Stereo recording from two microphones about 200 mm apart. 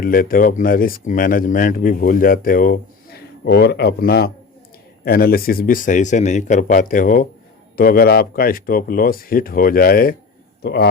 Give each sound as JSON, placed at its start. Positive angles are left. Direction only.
{"t": 0.0, "sound": "a man's voice", "side_deg": 45}